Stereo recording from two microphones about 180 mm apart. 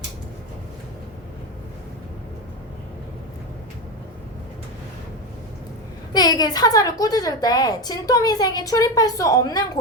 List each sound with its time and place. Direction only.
6.1 s a woman's voice: 20° left (ahead or behind)